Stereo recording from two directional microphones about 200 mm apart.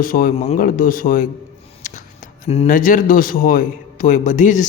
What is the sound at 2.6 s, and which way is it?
A man's voice, 40° left (ahead or behind).